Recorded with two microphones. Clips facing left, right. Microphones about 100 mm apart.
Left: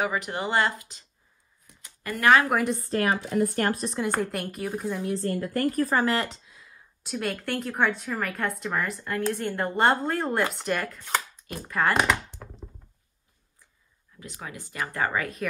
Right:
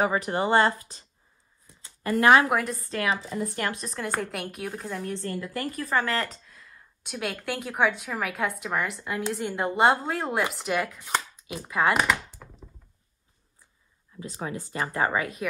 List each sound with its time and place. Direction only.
0.0 s speech: 35° right (ahead or behind)
1.7 s a sound: 30° right (ahead or behind)
2.5 s a woman's voice: centre (ahead or behind)
2.8 s speech: 35° left (ahead or behind)
3.1 s speech: 70° left (ahead or behind)
3.5 s a woman's voice: 45° left (ahead or behind)
3.9 s a woman's voice: 5° left (ahead or behind)
5.1 s a woman's voice: 45° left (ahead or behind)
5.9 s speech: 30° left (ahead or behind)
6.4 s a sound: 5° left (ahead or behind)
8.0 s a woman's voice: 5° right (ahead or behind)
12.0 s chopping: centre (ahead or behind)
14.2 s speech: 30° right (ahead or behind)
14.9 s speech: 20° right (ahead or behind)